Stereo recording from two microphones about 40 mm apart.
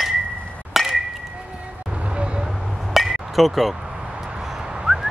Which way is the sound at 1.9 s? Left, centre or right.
Right.